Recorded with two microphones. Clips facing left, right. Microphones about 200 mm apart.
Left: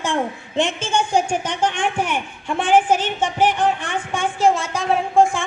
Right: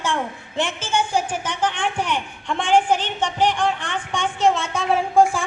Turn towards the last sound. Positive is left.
turn(degrees=0)  # may be behind; listen again after turning